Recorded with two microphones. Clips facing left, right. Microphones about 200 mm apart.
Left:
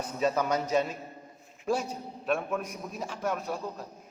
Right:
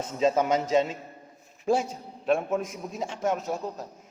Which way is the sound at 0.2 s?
25° right (ahead or behind).